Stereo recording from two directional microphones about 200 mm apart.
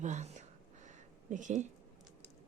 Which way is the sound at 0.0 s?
35° right (ahead or behind).